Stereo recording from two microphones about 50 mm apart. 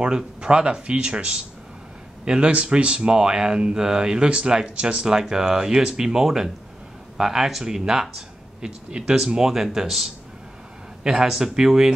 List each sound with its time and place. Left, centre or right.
0.0 s speech: right